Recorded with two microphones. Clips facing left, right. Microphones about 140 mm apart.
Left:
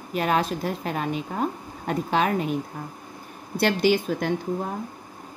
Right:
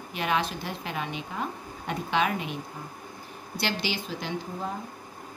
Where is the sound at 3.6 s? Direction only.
50° left (ahead or behind).